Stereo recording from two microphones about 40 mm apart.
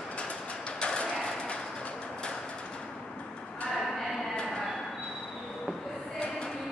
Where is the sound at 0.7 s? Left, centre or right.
Left.